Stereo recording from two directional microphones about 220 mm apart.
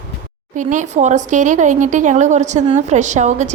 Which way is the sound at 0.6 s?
35° right (ahead or behind).